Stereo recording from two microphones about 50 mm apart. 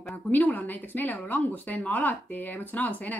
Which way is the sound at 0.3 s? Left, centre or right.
Left.